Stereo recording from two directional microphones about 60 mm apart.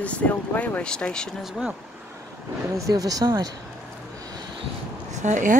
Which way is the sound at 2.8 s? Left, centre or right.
Right.